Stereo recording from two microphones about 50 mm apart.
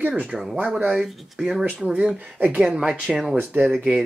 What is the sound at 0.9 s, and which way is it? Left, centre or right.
Speech, centre.